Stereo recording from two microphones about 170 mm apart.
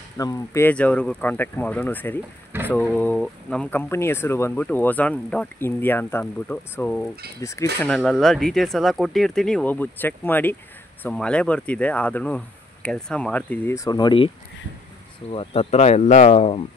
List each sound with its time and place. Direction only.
0.2 s speech: 20° left (ahead or behind)
15.3 s speech: 35° left (ahead or behind)